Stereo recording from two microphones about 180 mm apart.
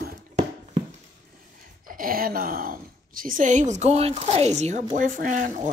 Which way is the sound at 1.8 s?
50° right (ahead or behind).